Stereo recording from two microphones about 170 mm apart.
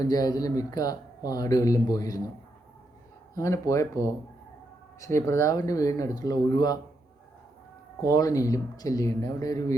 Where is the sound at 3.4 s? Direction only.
15° left (ahead or behind).